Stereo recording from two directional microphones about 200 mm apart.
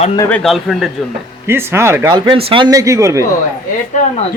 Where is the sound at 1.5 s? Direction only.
10° right (ahead or behind).